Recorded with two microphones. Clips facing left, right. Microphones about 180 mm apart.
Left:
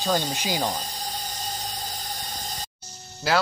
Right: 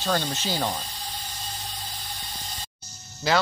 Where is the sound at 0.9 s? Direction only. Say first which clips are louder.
Left 4 dB; 40° left (ahead or behind).